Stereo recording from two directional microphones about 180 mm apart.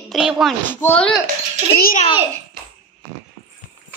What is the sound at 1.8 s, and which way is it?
Speech, 50° left (ahead or behind).